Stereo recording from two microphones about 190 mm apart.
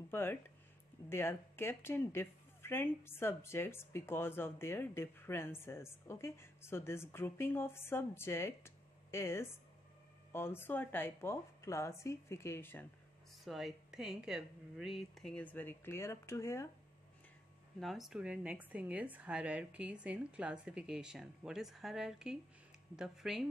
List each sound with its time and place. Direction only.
0.1 s speech: 10° left (ahead or behind)
13.4 s a woman's voice: centre (ahead or behind); by 16.6 s 15° left (ahead or behind)
17.7 s a woman's voice: centre (ahead or behind)